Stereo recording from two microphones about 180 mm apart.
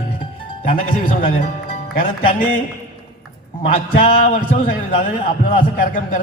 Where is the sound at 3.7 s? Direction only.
50° left (ahead or behind).